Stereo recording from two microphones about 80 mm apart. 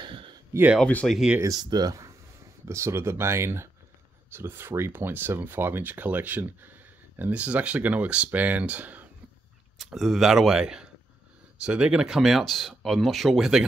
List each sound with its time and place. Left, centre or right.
0.0 s a sound: right
1.0 s speech: centre
1.4 s speech: right
2.6 s speech: right; by 9.0 s centre
9.8 s speech: centre